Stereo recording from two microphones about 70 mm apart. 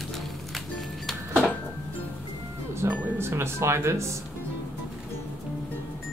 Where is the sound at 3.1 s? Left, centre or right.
Right.